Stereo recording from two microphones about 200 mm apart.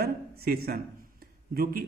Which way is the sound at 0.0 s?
50° right (ahead or behind).